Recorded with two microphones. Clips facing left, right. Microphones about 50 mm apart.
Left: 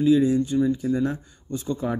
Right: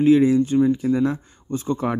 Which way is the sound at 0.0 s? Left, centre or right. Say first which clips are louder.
Right 4 dB; right.